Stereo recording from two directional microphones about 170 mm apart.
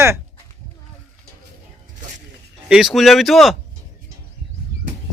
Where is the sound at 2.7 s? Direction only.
5° right (ahead or behind).